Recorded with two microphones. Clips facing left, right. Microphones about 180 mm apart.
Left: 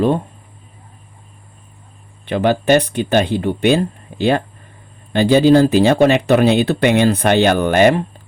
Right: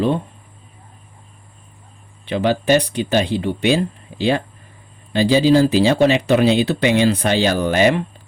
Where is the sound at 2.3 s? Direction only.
55° left (ahead or behind).